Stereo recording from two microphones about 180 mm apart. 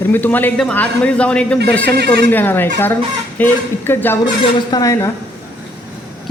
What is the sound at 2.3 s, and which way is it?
A man's voice, 10° left (ahead or behind).